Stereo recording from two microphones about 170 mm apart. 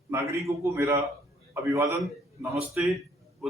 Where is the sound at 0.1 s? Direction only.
15° right (ahead or behind).